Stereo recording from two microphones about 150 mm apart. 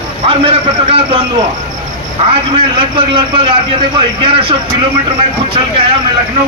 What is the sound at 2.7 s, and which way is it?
A man's voice, 35° right (ahead or behind).